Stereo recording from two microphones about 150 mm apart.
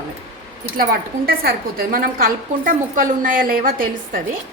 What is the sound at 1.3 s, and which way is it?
A woman's voice, 85° right.